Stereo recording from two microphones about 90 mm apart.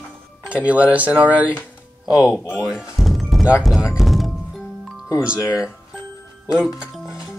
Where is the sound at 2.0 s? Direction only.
40° left (ahead or behind).